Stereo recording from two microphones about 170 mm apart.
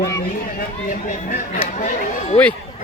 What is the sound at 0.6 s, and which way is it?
Speech, 50° left (ahead or behind).